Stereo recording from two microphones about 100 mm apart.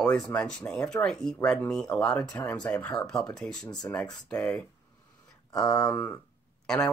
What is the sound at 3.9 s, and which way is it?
Speech, 25° left (ahead or behind).